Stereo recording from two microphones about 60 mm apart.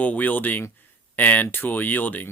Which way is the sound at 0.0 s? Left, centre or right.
Left.